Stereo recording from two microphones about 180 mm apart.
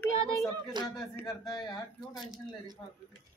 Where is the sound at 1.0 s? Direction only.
5° left (ahead or behind).